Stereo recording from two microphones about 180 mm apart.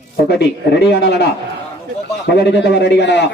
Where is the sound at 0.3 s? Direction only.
65° left (ahead or behind).